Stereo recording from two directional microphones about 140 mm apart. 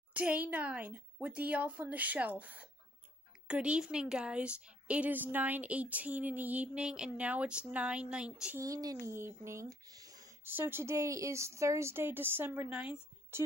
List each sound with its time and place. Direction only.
0.1 s a woman's voice: 10° right (ahead or behind)
8.5 s a woman's voice: 25° right (ahead or behind); by 13.0 s 5° right (ahead or behind)